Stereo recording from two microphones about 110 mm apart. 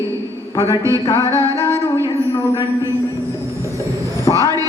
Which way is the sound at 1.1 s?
25° left (ahead or behind).